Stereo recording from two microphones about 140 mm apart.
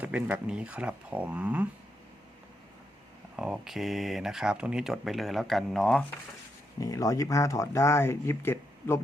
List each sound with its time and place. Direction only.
0.0 s speech: 10° right (ahead or behind)
3.3 s speech: 5° right (ahead or behind)
6.7 s speech: 25° left (ahead or behind)